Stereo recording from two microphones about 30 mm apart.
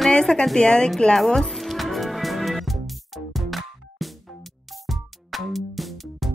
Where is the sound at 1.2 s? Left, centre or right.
Centre.